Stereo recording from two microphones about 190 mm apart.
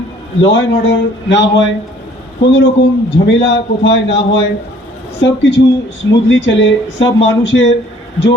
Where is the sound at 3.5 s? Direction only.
70° left (ahead or behind).